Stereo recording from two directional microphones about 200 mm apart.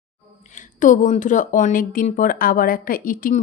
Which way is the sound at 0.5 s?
40° left (ahead or behind).